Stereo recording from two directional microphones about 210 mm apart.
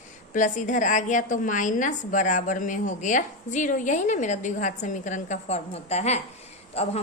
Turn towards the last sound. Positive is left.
turn(degrees=30)  # may be behind; listen again after turning